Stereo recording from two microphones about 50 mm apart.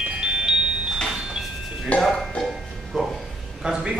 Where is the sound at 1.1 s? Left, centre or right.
Centre.